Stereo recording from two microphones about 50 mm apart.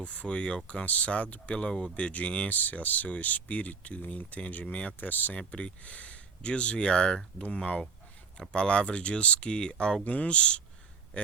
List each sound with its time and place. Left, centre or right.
0.0 s speech: left
2.6 s speech: left
5.4 s speech: left
10.0 s speech: left
11.1 s a sound: left